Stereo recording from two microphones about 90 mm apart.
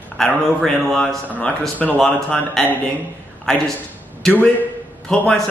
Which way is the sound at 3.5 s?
5° left (ahead or behind).